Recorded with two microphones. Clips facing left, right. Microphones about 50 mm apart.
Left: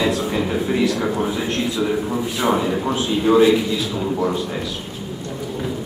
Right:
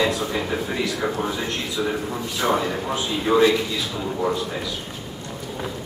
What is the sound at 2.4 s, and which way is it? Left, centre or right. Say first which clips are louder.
Speech: left 2 dB; centre.